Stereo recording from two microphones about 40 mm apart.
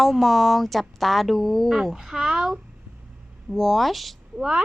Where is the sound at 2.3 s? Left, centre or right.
Right.